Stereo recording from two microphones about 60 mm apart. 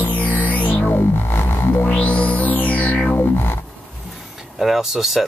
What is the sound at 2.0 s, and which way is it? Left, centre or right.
Music, left.